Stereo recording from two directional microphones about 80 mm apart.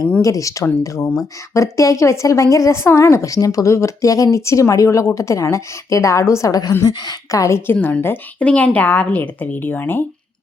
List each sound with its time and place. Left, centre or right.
0.2 s a woman's voice: left
6.8 s speech: left
7.7 s speech: left
8.4 s speech: centre